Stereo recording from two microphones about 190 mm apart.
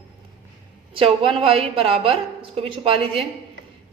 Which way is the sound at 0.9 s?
30° right (ahead or behind).